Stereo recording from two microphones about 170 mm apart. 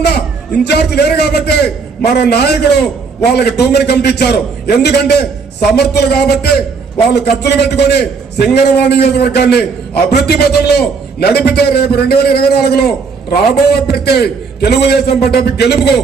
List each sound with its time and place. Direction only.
0.6 s a man's voice: 75° left (ahead or behind)